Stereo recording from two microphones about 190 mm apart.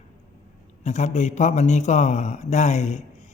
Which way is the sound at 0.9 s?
35° left (ahead or behind).